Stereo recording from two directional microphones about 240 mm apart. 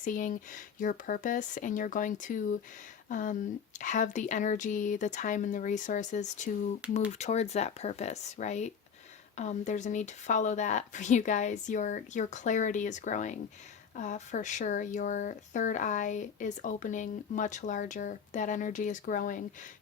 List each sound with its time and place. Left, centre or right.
0.0 s speech: left